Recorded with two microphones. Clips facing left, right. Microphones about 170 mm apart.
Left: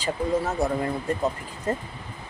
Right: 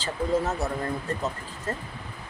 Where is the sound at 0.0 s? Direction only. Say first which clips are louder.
Left 1 dB; 15° left (ahead or behind).